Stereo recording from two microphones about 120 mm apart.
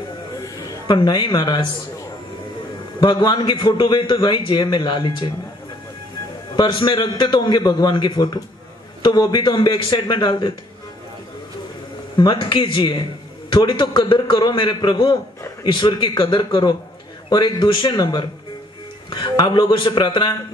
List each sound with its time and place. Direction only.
0.8 s a man's voice: 40° left (ahead or behind)
3.0 s a man's voice: 35° left (ahead or behind)
6.5 s a man's voice: 40° left (ahead or behind)
12.2 s a man's voice: 40° left (ahead or behind)